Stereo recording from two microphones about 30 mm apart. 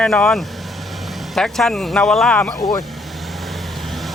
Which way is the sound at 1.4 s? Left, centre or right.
Centre.